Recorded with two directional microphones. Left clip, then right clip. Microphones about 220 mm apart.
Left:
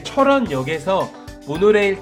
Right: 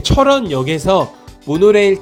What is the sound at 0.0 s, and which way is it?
Speech, 35° right (ahead or behind).